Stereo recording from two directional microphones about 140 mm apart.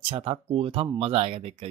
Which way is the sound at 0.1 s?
40° right (ahead or behind).